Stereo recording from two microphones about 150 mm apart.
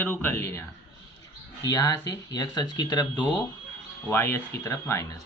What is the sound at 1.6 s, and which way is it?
Speech, 25° left (ahead or behind).